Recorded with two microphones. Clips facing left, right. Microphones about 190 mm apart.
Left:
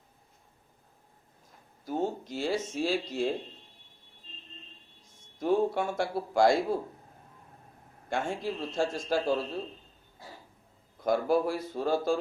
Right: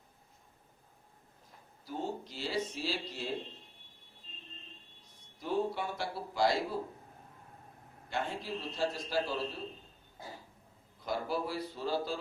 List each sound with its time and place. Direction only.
1.8 s speech: 45° left (ahead or behind)
5.1 s speech: 50° left (ahead or behind)
8.1 s speech: 45° left (ahead or behind)
11.0 s speech: 50° left (ahead or behind)